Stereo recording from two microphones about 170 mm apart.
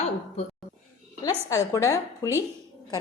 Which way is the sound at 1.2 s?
20° left (ahead or behind).